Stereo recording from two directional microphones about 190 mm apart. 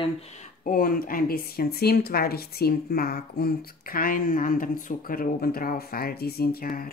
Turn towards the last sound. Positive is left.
turn(degrees=50)  # may be behind; listen again after turning